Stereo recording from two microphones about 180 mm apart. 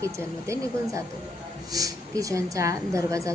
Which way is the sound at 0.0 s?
15° right (ahead or behind).